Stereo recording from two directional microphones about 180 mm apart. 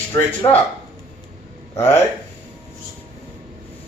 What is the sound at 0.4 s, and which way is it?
Speech, 20° left (ahead or behind).